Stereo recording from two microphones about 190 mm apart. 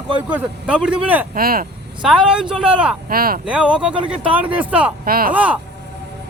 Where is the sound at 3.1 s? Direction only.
50° right (ahead or behind).